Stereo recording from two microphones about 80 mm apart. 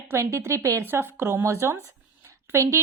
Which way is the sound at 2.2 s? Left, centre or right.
Right.